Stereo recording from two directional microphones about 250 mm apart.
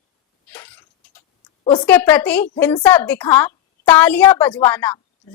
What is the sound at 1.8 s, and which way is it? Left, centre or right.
Speech, centre.